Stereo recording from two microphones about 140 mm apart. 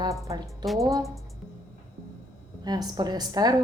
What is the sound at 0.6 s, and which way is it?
Speech, centre (ahead or behind).